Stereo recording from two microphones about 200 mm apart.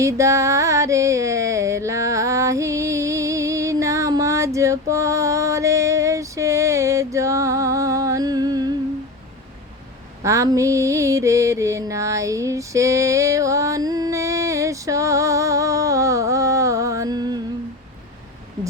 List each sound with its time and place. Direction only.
0.0 s music: 15° right (ahead or behind)
10.2 s mantra: 15° right (ahead or behind)